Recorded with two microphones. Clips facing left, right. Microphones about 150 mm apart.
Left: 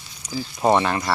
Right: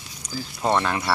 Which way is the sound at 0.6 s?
10° left (ahead or behind).